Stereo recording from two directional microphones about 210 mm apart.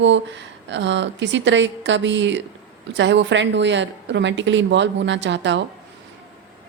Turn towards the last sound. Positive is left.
turn(degrees=-60)  # may be behind; listen again after turning